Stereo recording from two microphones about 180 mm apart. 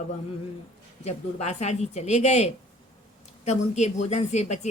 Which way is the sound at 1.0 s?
40° left (ahead or behind).